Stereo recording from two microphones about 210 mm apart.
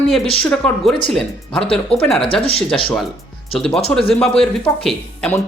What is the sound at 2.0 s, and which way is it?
Speech, 5° left (ahead or behind).